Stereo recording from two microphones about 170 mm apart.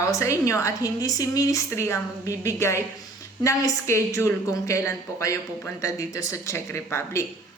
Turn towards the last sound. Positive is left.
turn(degrees=15)  # may be behind; listen again after turning